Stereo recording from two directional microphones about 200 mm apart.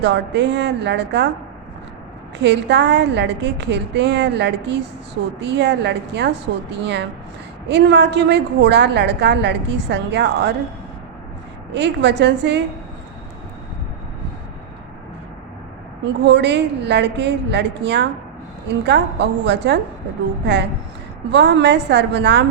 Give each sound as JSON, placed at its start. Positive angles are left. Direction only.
{"t": 0.0, "sound": "a woman's voice", "side_deg": -60}
{"t": 2.4, "sound": "a woman's voice", "side_deg": -60}
{"t": 11.7, "sound": "a woman's voice", "side_deg": -60}
{"t": 16.2, "sound": "a woman's voice", "side_deg": -60}